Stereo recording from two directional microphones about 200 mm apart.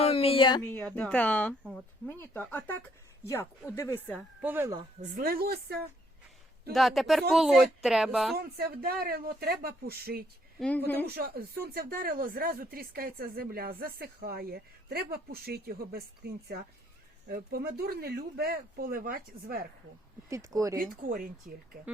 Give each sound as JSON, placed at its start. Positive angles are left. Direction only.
{"t": 0.0, "sound": "a sound", "side_deg": 30}
{"t": 0.6, "sound": "speech", "side_deg": 5}
{"t": 4.4, "sound": "speech", "side_deg": -10}
{"t": 5.1, "sound": "speech", "side_deg": -45}
{"t": 6.7, "sound": "speech", "side_deg": 0}
{"t": 8.4, "sound": "speech", "side_deg": -50}
{"t": 10.6, "sound": "speech", "side_deg": 5}
{"t": 11.0, "sound": "speech", "side_deg": -50}
{"t": 20.3, "sound": "speech", "side_deg": -15}
{"t": 20.7, "sound": "speech", "side_deg": -45}
{"t": 21.5, "sound": "speech", "side_deg": -5}